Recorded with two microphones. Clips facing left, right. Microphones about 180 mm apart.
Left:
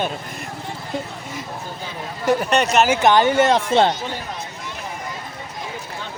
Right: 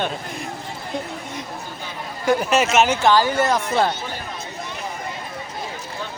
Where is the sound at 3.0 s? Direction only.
20° left (ahead or behind).